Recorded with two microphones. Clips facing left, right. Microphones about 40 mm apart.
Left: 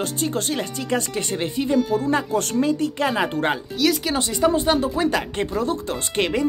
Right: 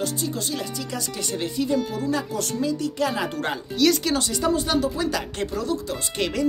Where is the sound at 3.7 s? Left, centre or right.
Centre.